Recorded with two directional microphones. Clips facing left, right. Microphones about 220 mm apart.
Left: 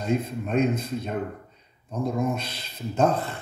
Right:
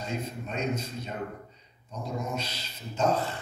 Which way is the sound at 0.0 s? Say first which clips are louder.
Left 8 dB; 55° left (ahead or behind).